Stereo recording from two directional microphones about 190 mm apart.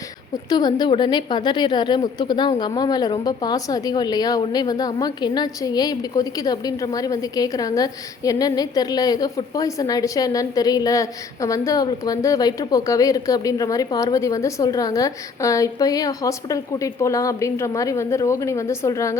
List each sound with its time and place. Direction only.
0.5 s a woman's voice: 20° left (ahead or behind)